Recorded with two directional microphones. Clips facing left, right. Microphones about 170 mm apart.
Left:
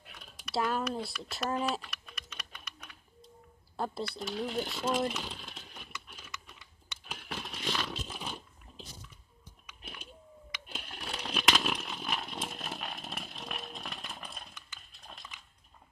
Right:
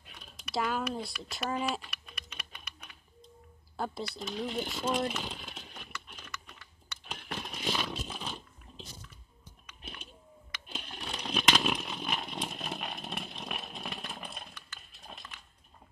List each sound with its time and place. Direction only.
0.2 s typing: centre (ahead or behind)
3.7 s speech: centre (ahead or behind)
6.0 s typing: 5° left (ahead or behind)
7.1 s a sound: 5° left (ahead or behind)
8.2 s biting: 10° left (ahead or behind)
9.7 s a sound: 10° left (ahead or behind)